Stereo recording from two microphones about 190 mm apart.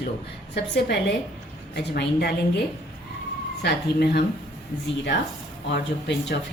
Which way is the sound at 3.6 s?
60° left (ahead or behind).